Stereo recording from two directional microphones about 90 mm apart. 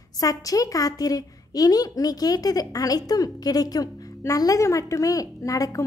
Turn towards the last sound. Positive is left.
turn(degrees=40)  # may be behind; listen again after turning